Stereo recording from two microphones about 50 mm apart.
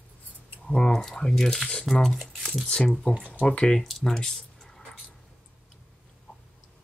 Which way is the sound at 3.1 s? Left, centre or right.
Left.